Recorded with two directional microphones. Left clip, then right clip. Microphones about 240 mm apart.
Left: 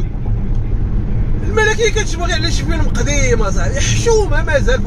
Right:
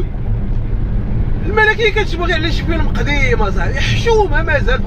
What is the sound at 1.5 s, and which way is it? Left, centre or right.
Speech, left.